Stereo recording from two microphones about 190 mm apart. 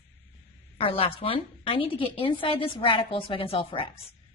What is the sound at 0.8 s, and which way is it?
A woman's voice, 30° left (ahead or behind).